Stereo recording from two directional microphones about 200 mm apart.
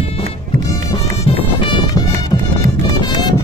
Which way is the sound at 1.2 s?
25° left (ahead or behind).